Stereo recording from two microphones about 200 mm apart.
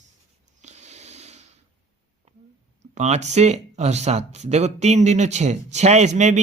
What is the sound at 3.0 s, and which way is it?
Speech, 35° right (ahead or behind).